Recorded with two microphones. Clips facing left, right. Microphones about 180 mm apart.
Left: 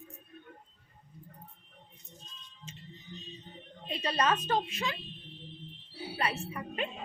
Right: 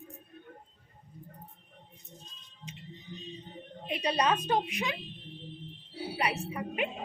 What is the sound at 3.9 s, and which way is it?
A woman's voice, 15° right (ahead or behind).